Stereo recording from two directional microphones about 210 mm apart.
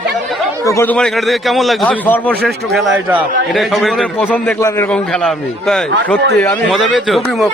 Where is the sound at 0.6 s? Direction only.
15° left (ahead or behind).